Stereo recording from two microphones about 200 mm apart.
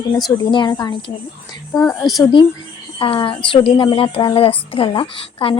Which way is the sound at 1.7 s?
5° left (ahead or behind).